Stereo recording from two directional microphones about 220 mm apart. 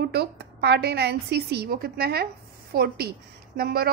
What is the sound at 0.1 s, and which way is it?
A woman's voice, 50° right (ahead or behind).